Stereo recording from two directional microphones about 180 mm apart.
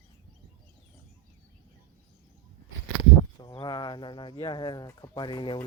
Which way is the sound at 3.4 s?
25° left (ahead or behind).